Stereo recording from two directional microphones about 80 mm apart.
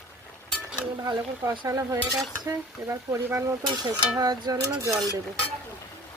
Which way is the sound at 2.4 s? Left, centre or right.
Right.